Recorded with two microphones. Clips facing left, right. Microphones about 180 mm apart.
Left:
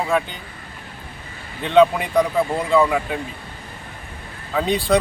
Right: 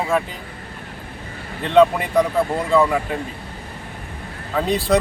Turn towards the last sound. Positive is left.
turn(degrees=0)  # may be behind; listen again after turning